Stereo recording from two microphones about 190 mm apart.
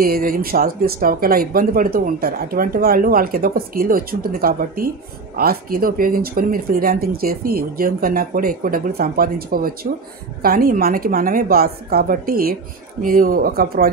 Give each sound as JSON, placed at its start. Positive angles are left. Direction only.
{"t": 0.0, "sound": "speech", "side_deg": -50}